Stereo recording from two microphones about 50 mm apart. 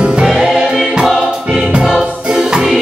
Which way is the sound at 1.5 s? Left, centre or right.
Centre.